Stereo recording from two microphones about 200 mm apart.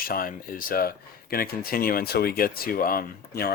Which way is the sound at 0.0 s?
45° left (ahead or behind).